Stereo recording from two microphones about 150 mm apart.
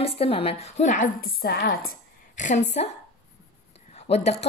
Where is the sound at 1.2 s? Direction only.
85° left; by 2.9 s 50° left (ahead or behind).